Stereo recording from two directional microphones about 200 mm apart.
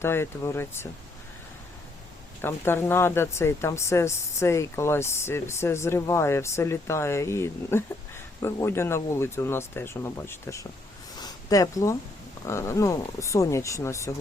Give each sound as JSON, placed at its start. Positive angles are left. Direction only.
{"t": 0.0, "sound": "speech", "side_deg": 10}
{"t": 2.4, "sound": "speech", "side_deg": 10}
{"t": 11.2, "sound": "a sound", "side_deg": 20}
{"t": 12.5, "sound": "speech", "side_deg": 15}